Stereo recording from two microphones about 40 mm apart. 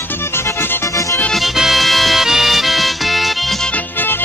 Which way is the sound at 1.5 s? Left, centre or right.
Centre.